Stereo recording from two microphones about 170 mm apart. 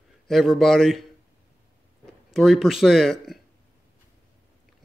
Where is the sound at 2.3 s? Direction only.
Centre (ahead or behind).